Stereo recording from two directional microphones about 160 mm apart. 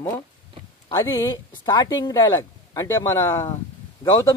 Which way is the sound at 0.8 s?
25° left (ahead or behind).